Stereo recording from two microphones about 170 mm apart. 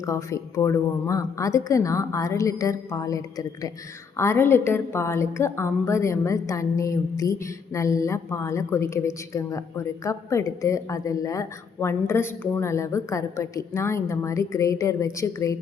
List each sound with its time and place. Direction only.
0.0 s a woman's voice: 20° left (ahead or behind)